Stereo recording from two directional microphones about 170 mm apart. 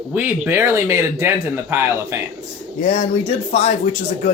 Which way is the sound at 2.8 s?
40° left (ahead or behind).